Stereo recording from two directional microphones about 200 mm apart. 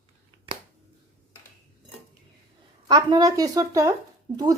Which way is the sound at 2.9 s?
20° right (ahead or behind).